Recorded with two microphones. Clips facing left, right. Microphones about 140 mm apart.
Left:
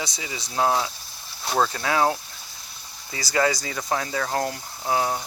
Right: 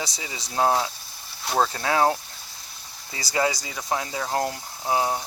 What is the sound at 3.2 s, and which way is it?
Speech, 25° right (ahead or behind).